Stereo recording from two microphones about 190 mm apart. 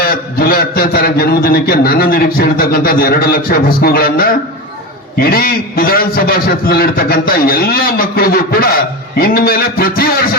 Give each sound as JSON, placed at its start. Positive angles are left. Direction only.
{"t": 0.0, "sound": "a man's voice", "side_deg": 50}